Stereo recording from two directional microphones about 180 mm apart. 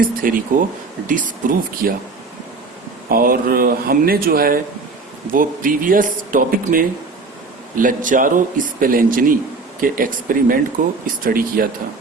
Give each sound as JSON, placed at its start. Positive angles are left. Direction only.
{"t": 0.0, "sound": "a man's voice", "side_deg": -50}
{"t": 3.1, "sound": "a man's voice", "side_deg": -55}